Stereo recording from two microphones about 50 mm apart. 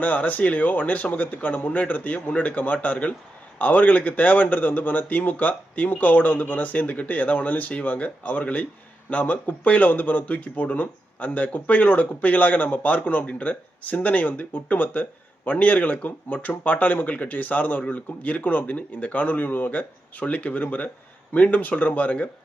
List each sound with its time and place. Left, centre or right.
0.0 s a man's voice: left